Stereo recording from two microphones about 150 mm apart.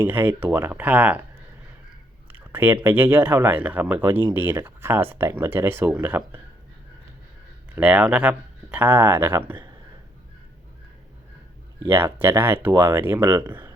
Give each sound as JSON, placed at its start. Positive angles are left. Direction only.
{"t": 0.0, "sound": "speech", "side_deg": -15}
{"t": 2.2, "sound": "speech", "side_deg": -10}
{"t": 7.8, "sound": "speech", "side_deg": -10}
{"t": 11.8, "sound": "speech", "side_deg": -15}
{"t": 13.3, "sound": "speech", "side_deg": -30}